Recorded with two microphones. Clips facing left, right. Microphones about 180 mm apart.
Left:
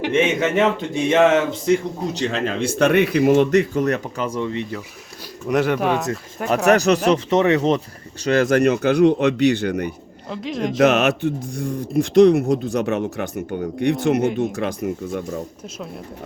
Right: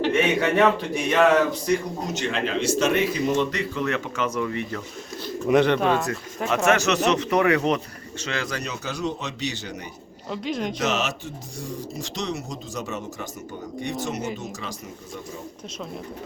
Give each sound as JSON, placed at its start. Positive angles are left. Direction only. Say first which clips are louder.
{"t": 0.1, "sound": "speech", "louder": "left 6 dB", "side_deg": 25}
{"t": 2.3, "sound": "speech", "louder": "left 1 dB", "side_deg": 55}
{"t": 4.3, "sound": "speech", "louder": "left 4 dB", "side_deg": 25}
{"t": 5.5, "sound": "speech", "louder": "even", "side_deg": 5}
{"t": 6.7, "sound": "speech", "louder": "left 6 dB", "side_deg": 35}
{"t": 8.2, "sound": "speech", "louder": "left 14 dB", "side_deg": 45}
{"t": 10.2, "sound": "speech", "louder": "left 3 dB", "side_deg": 0}
{"t": 10.8, "sound": "speech", "louder": "left 10 dB", "side_deg": 60}